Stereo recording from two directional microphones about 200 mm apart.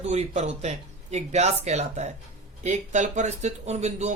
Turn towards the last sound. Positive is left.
turn(degrees=-35)  # may be behind; listen again after turning